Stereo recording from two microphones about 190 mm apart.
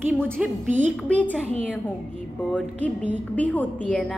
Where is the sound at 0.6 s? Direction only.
40° right (ahead or behind).